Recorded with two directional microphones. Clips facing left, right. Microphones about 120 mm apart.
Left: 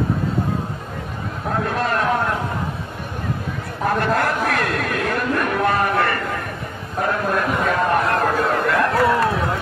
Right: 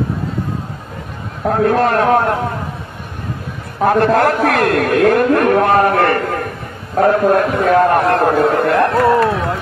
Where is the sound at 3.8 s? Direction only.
75° right (ahead or behind); by 6.4 s 55° right (ahead or behind).